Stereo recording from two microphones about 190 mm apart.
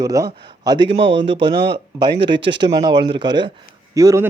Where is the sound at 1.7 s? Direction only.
25° right (ahead or behind).